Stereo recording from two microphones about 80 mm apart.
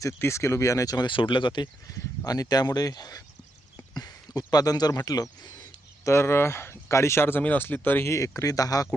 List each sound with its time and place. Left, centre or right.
0.2 s speech: left
0.9 s speech: left
1.6 s speech: left
6.1 s speech: left
8.1 s speech: left